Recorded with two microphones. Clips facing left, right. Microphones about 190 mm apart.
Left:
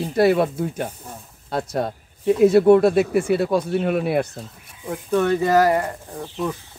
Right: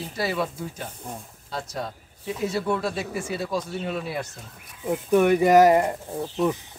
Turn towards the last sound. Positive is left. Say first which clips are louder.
# right 2 dB
turn(degrees=-20)  # may be behind; listen again after turning